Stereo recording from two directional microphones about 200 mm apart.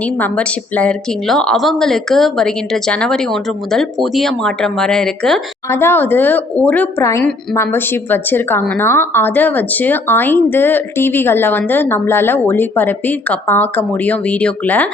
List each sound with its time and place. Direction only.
0.2 s a woman's voice: 5° left (ahead or behind)